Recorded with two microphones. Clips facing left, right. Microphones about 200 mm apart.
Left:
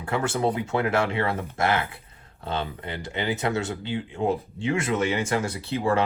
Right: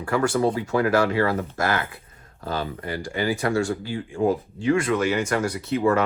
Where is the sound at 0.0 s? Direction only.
25° left (ahead or behind).